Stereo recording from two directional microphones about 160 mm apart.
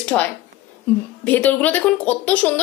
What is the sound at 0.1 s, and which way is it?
Speech, 5° left (ahead or behind).